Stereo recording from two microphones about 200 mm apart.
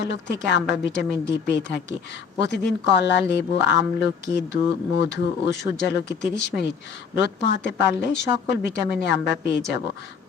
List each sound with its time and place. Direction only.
0.0 s a woman's voice: 60° left (ahead or behind)